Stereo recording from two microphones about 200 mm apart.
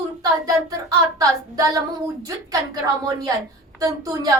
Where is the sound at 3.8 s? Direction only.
15° right (ahead or behind).